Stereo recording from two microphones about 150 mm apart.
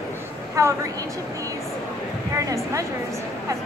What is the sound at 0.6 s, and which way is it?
Speech, 20° right (ahead or behind).